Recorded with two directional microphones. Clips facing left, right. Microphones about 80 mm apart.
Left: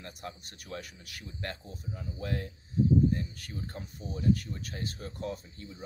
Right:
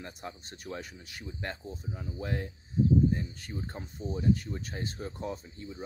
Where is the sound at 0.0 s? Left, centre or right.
Right.